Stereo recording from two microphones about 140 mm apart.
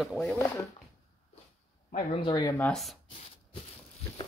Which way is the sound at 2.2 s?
30° left (ahead or behind).